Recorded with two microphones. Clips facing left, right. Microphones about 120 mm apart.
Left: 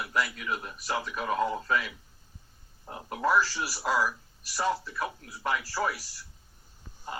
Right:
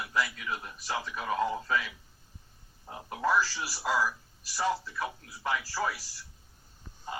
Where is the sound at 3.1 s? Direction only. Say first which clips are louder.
Left 2 dB; 20° left (ahead or behind).